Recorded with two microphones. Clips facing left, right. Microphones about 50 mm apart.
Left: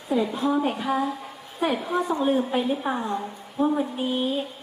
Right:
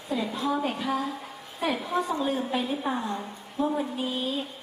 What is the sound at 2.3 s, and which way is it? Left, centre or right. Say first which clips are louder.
Speech: left 5 dB; left.